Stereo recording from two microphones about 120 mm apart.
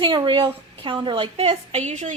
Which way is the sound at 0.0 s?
40° right (ahead or behind).